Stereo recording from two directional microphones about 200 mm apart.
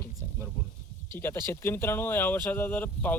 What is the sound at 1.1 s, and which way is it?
Speech, 10° left (ahead or behind).